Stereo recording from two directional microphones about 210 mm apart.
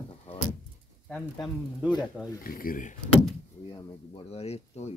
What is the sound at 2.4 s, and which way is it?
Speech, 45° left (ahead or behind).